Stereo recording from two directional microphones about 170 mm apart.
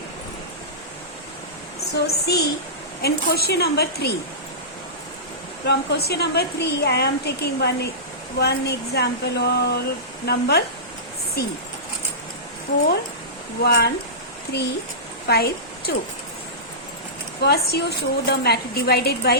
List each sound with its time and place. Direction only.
1.9 s speech: 75° left (ahead or behind)
5.6 s speech: 75° left (ahead or behind)
13.6 s speech: 70° left (ahead or behind)
15.3 s speech: 70° left (ahead or behind)
17.4 s speech: 70° left (ahead or behind)